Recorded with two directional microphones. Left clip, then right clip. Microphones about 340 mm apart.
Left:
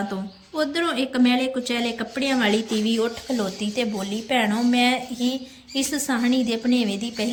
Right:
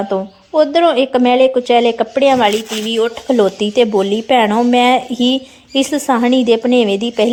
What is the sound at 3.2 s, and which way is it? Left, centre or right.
Speech, right.